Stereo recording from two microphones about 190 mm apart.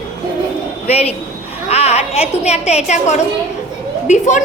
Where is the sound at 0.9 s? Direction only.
35° left (ahead or behind).